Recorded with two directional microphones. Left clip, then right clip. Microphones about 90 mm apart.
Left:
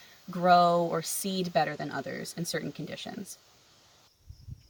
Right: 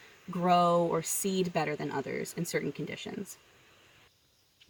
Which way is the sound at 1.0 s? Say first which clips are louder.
Right 2 dB; 15° left (ahead or behind).